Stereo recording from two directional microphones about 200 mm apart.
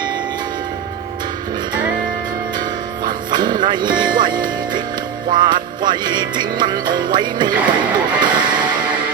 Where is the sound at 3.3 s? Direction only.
20° right (ahead or behind).